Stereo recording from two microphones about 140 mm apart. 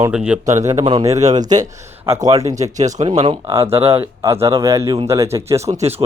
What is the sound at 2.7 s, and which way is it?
Speech, 60° right (ahead or behind).